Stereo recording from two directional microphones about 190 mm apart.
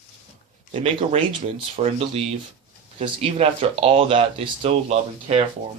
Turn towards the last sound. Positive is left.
turn(degrees=-30)  # may be behind; listen again after turning